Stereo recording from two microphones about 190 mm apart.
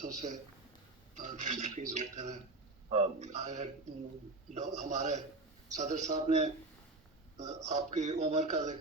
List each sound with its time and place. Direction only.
0.0 s a man's voice: 40° right (ahead or behind)